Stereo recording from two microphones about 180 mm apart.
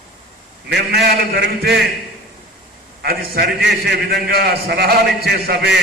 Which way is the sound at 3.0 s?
60° right (ahead or behind).